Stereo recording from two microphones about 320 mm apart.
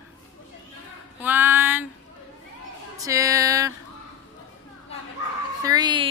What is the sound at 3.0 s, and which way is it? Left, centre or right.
Speech, centre.